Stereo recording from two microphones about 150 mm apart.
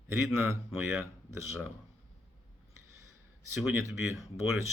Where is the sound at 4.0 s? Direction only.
5° right (ahead or behind).